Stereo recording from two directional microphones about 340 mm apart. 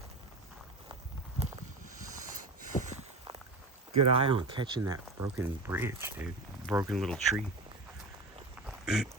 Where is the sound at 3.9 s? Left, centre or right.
Centre.